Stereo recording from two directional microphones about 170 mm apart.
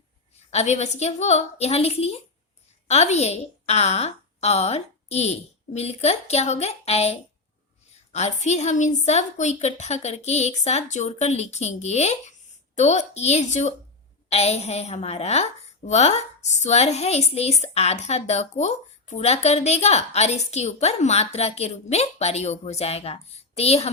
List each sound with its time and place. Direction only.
0.5 s a woman's voice: 40° left (ahead or behind)